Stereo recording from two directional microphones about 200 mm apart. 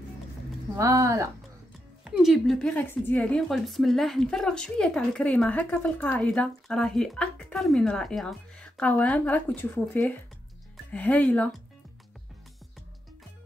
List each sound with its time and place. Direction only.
0.7 s speech: 15° right (ahead or behind)
2.0 s a woman's voice: centre (ahead or behind)